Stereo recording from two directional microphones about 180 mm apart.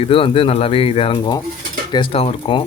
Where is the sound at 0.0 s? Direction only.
30° left (ahead or behind).